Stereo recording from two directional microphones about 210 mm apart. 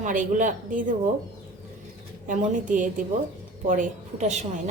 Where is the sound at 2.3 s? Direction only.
40° right (ahead or behind).